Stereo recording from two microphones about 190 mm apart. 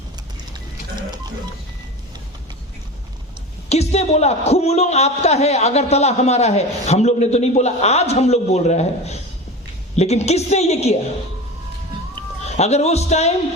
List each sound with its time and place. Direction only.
3.7 s a man's voice: 35° left (ahead or behind)
12.5 s a man's voice: 35° left (ahead or behind)